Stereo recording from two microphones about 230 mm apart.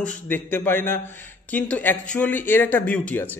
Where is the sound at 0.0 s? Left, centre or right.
Centre.